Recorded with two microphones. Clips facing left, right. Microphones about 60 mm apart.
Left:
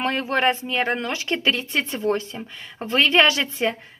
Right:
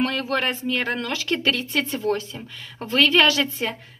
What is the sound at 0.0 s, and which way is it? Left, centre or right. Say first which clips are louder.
A woman's voice: left 2 dB; left.